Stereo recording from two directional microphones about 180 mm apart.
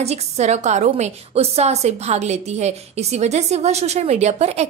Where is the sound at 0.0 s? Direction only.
35° right (ahead or behind).